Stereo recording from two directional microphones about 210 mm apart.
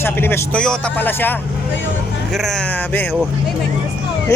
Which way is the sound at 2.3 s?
Centre (ahead or behind).